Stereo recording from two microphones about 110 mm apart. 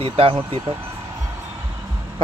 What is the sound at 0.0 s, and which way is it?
Speech, 60° right (ahead or behind).